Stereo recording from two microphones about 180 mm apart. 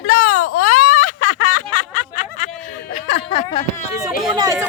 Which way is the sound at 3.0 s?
35° left (ahead or behind).